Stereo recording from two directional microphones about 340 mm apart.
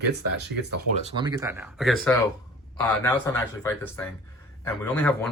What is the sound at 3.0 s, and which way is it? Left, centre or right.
Speech, centre.